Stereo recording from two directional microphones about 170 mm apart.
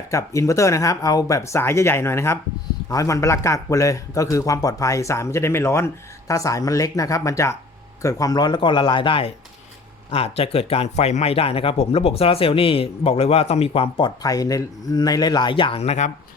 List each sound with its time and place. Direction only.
0.1 s a man's voice: 20° left (ahead or behind); by 16.1 s 40° left (ahead or behind)